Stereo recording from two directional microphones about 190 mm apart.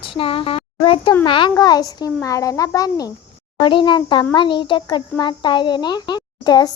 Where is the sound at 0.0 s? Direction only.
30° left (ahead or behind).